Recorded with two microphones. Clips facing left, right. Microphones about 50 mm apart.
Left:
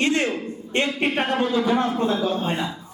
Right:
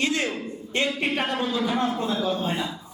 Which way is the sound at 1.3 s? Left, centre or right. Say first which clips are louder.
Left 5 dB; left.